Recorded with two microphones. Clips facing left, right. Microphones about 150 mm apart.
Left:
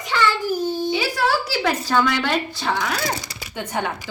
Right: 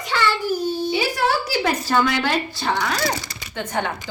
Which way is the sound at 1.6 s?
10° right (ahead or behind).